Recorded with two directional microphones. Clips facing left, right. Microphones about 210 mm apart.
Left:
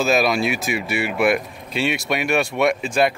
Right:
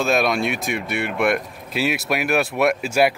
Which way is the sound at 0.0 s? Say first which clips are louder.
Left 1 dB; 5° left (ahead or behind).